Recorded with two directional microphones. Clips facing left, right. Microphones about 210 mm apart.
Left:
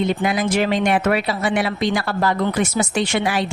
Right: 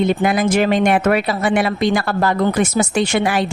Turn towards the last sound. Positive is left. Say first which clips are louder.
# right 3 dB
turn(degrees=-50)  # may be behind; listen again after turning